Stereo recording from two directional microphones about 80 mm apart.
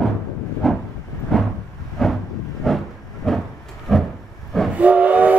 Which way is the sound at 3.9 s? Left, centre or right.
Centre.